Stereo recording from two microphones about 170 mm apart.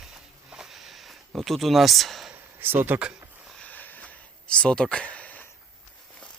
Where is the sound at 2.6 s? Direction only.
10° right (ahead or behind).